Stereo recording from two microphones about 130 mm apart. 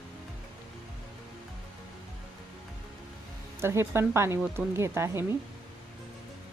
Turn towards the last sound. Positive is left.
turn(degrees=-20)  # may be behind; listen again after turning